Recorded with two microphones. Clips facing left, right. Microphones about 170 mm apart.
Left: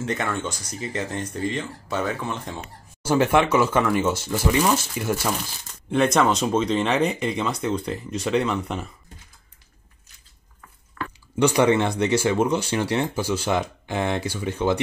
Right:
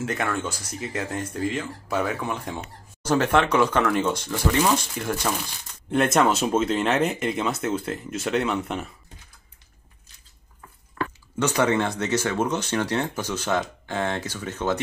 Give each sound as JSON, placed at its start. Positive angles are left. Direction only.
{"t": 0.0, "sound": "speech", "side_deg": -5}
{"t": 3.0, "sound": "speech", "side_deg": 10}
{"t": 11.0, "sound": "drip", "side_deg": -30}
{"t": 11.3, "sound": "speech", "side_deg": 15}